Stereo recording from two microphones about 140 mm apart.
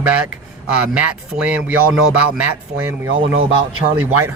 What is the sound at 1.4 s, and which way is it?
Speech, 10° right (ahead or behind).